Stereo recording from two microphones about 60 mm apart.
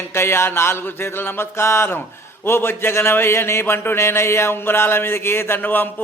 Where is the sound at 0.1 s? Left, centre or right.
Left.